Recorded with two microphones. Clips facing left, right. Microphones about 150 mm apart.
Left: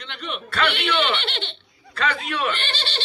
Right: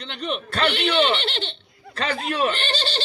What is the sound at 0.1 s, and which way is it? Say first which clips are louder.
Speech: right 3 dB; 35° right (ahead or behind).